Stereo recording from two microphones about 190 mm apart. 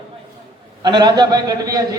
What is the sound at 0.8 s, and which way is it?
A man's voice, 20° right (ahead or behind).